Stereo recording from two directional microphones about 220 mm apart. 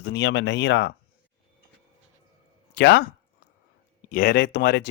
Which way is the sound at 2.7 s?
50° left (ahead or behind).